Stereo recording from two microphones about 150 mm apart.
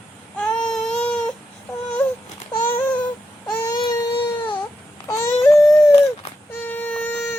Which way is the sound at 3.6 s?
25° left (ahead or behind).